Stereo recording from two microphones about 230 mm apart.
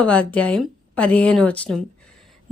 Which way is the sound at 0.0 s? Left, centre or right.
Centre.